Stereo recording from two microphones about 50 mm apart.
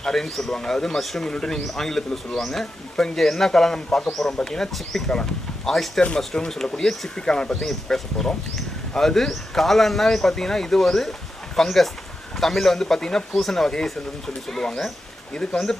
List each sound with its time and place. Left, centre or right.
0.0 s speech: centre
1.3 s speech: centre